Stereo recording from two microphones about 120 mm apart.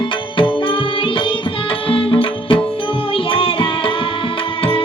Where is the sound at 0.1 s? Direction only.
45° left (ahead or behind).